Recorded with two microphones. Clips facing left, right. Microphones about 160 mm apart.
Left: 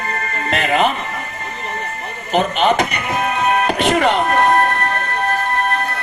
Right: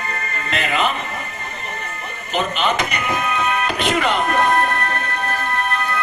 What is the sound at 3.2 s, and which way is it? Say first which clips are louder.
Music: left 7 dB; 45° left (ahead or behind).